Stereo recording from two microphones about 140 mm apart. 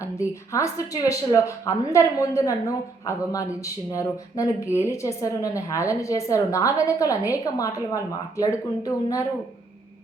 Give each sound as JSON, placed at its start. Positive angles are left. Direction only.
{"t": 0.0, "sound": "speech", "side_deg": 20}